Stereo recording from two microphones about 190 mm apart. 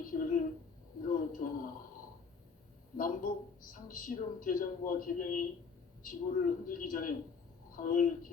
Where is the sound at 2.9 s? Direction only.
45° left (ahead or behind).